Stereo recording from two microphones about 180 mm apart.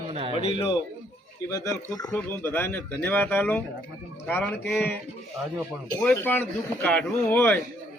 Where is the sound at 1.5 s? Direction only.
20° left (ahead or behind).